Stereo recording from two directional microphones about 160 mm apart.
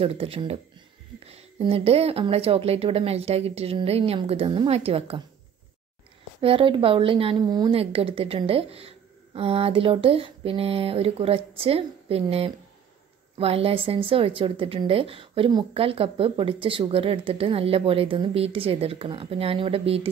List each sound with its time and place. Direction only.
0.0 s a woman's voice: 35° right (ahead or behind)
6.4 s a woman's voice: 35° right (ahead or behind)